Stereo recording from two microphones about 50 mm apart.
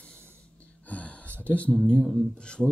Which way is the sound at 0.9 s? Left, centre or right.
Left.